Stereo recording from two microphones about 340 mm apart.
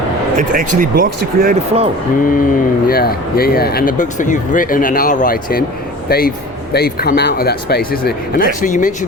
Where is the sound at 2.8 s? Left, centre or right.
Left.